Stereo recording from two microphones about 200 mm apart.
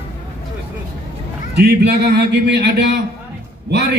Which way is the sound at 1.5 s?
55° right (ahead or behind).